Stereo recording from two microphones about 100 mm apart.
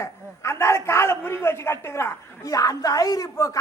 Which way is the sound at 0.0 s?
25° left (ahead or behind).